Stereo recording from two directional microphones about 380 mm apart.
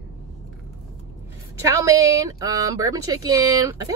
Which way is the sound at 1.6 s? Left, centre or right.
Centre.